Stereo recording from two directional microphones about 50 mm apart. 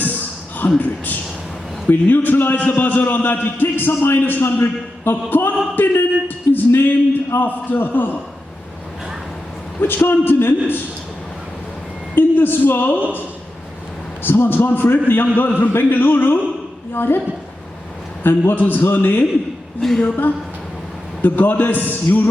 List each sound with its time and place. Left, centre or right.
0.0 s a sound: left
0.8 s a man's voice: left
5.7 s a sound: left
7.3 s a man's voice: left
9.8 s a man's voice: left
12.1 s a man's voice: left
14.2 s a man's voice: left
18.2 s a man's voice: left
19.8 s a woman's voice: centre
21.2 s a man's voice: left